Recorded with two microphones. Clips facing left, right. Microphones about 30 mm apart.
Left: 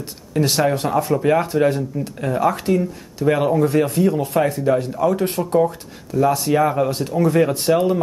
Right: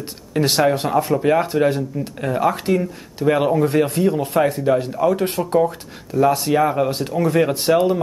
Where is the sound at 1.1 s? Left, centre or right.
Centre; by 4.0 s right.